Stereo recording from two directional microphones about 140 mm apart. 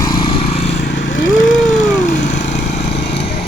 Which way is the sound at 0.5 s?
55° left (ahead or behind).